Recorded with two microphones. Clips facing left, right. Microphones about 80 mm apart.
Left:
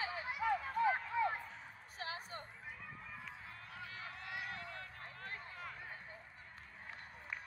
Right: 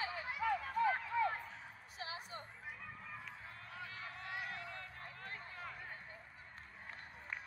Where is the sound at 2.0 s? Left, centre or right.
Left.